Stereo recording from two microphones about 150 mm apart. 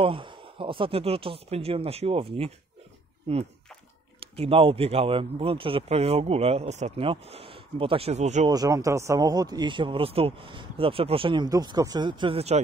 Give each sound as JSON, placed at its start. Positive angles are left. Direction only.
{"t": 0.0, "sound": "speech", "side_deg": -35}
{"t": 4.2, "sound": "speech", "side_deg": -40}
{"t": 8.5, "sound": "speech", "side_deg": -25}
{"t": 11.4, "sound": "speech", "side_deg": -25}